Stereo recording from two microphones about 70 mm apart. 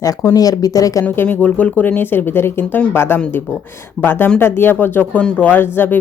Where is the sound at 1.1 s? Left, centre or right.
Left.